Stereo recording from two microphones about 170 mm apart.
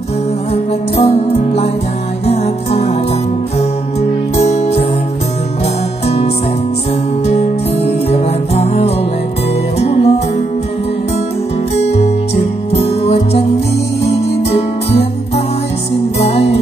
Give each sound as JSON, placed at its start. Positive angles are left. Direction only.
{"t": 0.5, "sound": "music", "side_deg": 35}
{"t": 4.4, "sound": "music", "side_deg": 40}
{"t": 6.0, "sound": "music", "side_deg": 40}
{"t": 11.8, "sound": "music", "side_deg": 40}
{"t": 16.2, "sound": "music", "side_deg": 40}